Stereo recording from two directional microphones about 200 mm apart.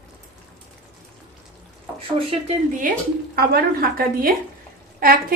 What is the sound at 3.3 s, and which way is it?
Speech, 50° right (ahead or behind).